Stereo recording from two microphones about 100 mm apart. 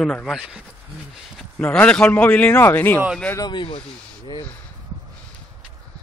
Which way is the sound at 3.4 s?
50° left (ahead or behind).